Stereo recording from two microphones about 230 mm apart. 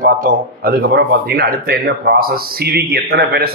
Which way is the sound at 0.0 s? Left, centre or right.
Right.